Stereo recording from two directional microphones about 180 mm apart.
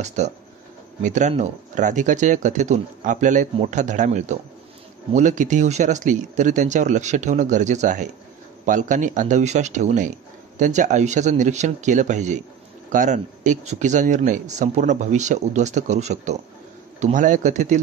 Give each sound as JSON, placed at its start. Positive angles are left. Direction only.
{"t": 0.0, "sound": "speech", "side_deg": -40}